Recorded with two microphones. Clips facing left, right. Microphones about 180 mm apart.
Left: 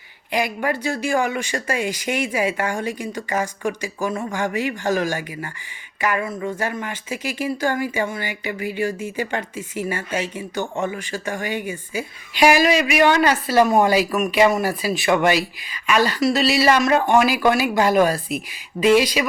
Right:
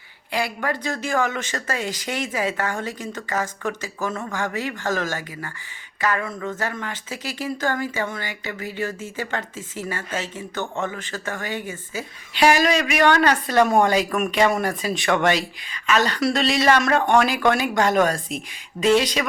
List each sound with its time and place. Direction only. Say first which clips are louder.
0.3 s speech: left 3 dB; 15° left (ahead or behind)